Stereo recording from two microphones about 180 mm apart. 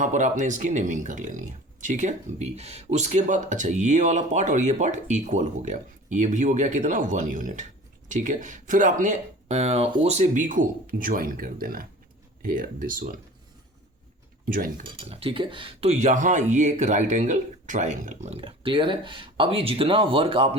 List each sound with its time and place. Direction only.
0.0 s speech: 45° right (ahead or behind)
14.4 s speech: 50° right (ahead or behind)
14.8 s speech: 30° right (ahead or behind)